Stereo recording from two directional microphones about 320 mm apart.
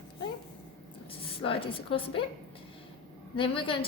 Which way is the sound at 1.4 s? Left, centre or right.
Centre.